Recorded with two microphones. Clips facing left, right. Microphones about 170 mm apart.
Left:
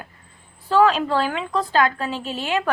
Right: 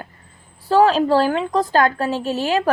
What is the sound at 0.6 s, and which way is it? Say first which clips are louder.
A woman's voice: right 3 dB; 35° right (ahead or behind).